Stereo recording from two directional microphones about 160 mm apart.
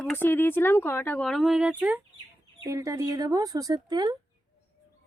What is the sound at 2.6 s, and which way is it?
Speech, 20° right (ahead or behind).